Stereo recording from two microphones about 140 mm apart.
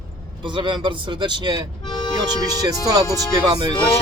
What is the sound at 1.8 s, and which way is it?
Music, 30° left (ahead or behind).